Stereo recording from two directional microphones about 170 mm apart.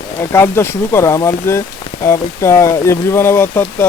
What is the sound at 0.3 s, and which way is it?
Speech, 15° left (ahead or behind).